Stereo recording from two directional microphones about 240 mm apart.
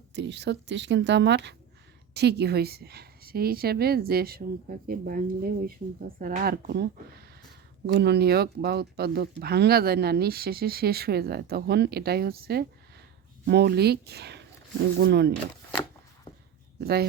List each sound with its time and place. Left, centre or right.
0.1 s a woman's voice: right
16.8 s speech: right